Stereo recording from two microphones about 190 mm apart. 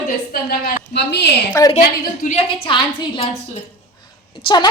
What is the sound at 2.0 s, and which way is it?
A woman's voice, 45° left (ahead or behind).